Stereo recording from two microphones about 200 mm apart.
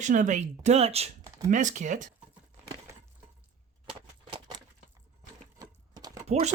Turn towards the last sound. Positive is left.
turn(degrees=-35)  # may be behind; listen again after turning